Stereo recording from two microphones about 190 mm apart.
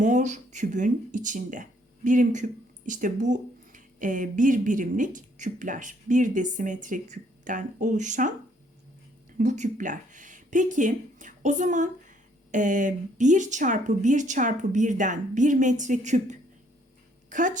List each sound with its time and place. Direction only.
0.0 s speech: 40° right (ahead or behind)
9.4 s a woman's voice: 40° right (ahead or behind)